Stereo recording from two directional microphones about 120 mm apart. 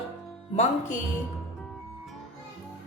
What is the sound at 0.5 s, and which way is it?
Music, 70° left (ahead or behind).